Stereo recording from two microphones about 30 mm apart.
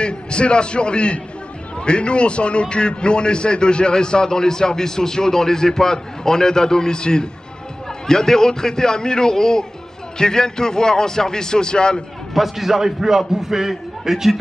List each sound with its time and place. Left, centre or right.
0.0 s a man's voice: left
12.4 s a man's voice: centre